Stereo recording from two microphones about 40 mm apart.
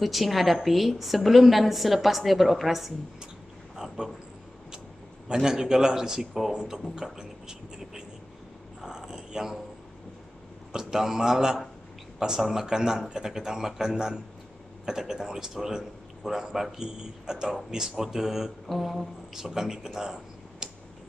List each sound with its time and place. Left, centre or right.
0.0 s a woman's voice: centre
4.0 s a man's voice: centre
5.3 s a man's voice: centre
8.8 s a sound: centre
10.7 s a man's voice: centre